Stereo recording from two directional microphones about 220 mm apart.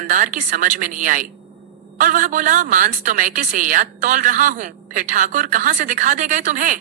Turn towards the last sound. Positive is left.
turn(degrees=-35)  # may be behind; listen again after turning